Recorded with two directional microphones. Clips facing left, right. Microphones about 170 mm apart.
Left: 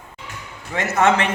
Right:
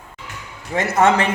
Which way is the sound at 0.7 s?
35° right (ahead or behind).